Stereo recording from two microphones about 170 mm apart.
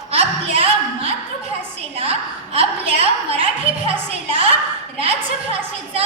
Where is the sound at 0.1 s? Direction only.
35° right (ahead or behind).